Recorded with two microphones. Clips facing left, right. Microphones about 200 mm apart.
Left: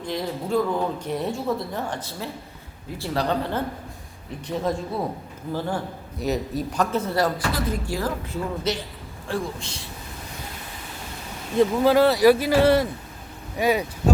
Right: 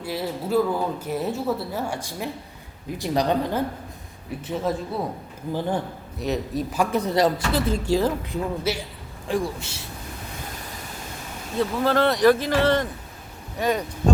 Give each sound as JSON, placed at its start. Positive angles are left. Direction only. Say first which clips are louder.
{"t": 0.0, "sound": "speech", "louder": "even", "side_deg": -5}
{"t": 4.4, "sound": "a man's voice", "louder": "even", "side_deg": 0}
{"t": 5.5, "sound": "speech", "louder": "right 2 dB", "side_deg": -20}
{"t": 6.1, "sound": "a man's voice", "louder": "even", "side_deg": 0}
{"t": 6.9, "sound": "speech", "louder": "right 5 dB", "side_deg": -15}
{"t": 8.7, "sound": "a man's voice", "louder": "even", "side_deg": -10}
{"t": 11.5, "sound": "speech", "louder": "left 4 dB", "side_deg": 15}